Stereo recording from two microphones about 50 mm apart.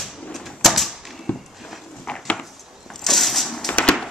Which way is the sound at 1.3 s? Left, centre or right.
Left.